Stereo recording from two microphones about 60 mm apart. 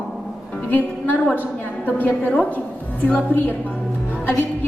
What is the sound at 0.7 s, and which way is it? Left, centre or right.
A woman's voice, left.